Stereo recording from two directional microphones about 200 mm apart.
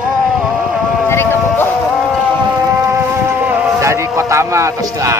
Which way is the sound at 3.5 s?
10° right (ahead or behind).